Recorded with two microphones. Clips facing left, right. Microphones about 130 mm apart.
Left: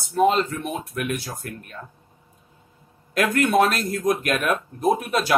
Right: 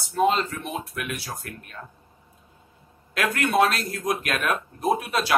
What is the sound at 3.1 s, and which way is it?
Speech, 45° left (ahead or behind).